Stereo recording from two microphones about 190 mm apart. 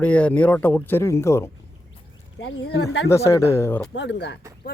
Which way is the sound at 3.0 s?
15° left (ahead or behind).